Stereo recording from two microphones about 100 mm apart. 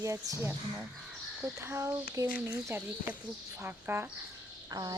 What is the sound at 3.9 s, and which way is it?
Speech, 25° right (ahead or behind).